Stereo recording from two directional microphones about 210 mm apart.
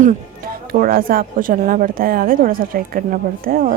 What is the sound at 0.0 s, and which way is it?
Speech, 40° right (ahead or behind).